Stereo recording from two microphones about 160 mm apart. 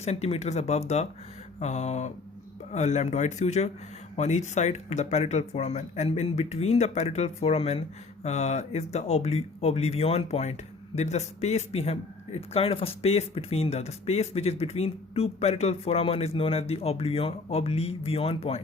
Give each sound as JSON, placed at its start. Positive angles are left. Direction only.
{"t": 0.0, "sound": "speech", "side_deg": 40}